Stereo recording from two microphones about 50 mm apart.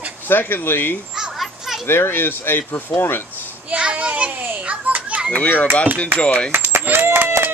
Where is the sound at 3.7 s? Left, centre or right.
Right.